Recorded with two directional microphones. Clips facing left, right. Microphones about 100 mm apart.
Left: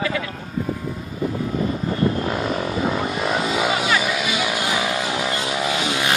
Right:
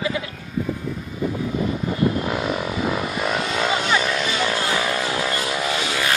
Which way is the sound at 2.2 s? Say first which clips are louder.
Left 1 dB; 5° right (ahead or behind).